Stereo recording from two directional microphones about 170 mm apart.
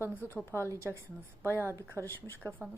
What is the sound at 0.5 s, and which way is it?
Speech, 15° left (ahead or behind).